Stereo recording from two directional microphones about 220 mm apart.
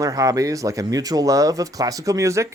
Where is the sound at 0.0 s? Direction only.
15° right (ahead or behind).